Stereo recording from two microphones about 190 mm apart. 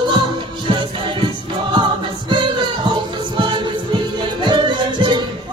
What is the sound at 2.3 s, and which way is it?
Music, 25° right (ahead or behind).